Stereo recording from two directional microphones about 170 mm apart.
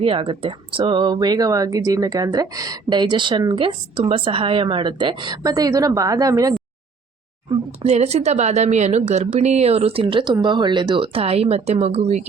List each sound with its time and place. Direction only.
0.0 s speech: 30° right (ahead or behind)
7.8 s a woman's voice: 40° right (ahead or behind)